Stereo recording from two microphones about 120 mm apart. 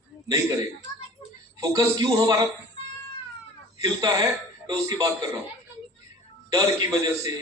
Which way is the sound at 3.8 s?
30° right (ahead or behind).